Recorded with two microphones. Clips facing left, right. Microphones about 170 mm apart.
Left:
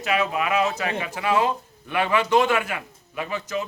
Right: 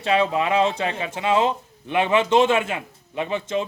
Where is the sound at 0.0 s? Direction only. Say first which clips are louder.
Right 3 dB; 30° right (ahead or behind).